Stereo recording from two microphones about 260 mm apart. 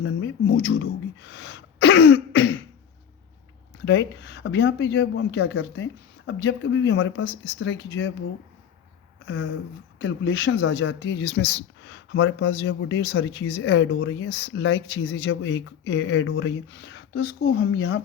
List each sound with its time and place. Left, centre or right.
0.0 s speech: left
1.2 s throat clearing: left
3.8 s speech: left
9.2 s a sound: left
10.0 s speech: left